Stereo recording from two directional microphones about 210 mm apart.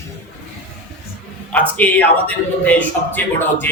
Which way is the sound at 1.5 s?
5° left (ahead or behind).